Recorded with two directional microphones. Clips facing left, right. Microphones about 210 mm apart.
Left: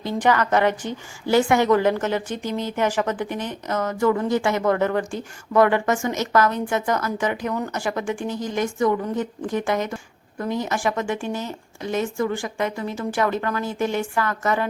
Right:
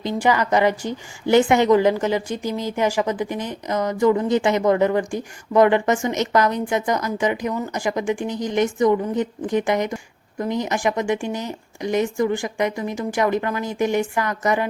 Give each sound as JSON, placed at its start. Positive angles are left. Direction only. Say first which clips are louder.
{"t": 0.0, "sound": "a woman's voice", "louder": "right 1 dB", "side_deg": -10}